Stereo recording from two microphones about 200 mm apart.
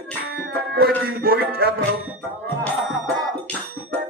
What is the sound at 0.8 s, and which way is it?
Speech, 50° right (ahead or behind).